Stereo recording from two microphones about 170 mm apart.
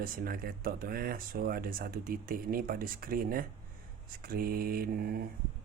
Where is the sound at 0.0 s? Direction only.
60° right (ahead or behind).